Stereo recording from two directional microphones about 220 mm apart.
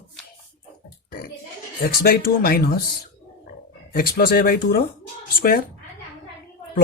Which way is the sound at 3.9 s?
45° left (ahead or behind).